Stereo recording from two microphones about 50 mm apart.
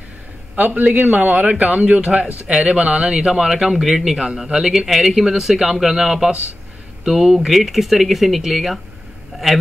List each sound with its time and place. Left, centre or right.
0.6 s a man's voice: right; by 8.7 s centre